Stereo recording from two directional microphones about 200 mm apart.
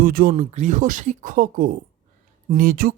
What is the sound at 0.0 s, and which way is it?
Speech, 45° right (ahead or behind).